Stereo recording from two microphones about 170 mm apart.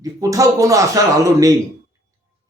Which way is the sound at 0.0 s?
20° right (ahead or behind).